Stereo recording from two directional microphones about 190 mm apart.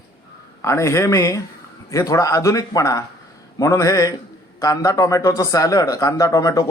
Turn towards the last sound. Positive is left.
turn(degrees=20)  # may be behind; listen again after turning